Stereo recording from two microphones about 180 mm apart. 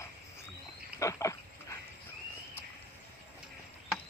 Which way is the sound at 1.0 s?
15° left (ahead or behind).